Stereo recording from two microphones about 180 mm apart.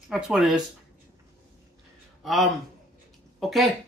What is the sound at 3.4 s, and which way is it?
Speech, centre (ahead or behind).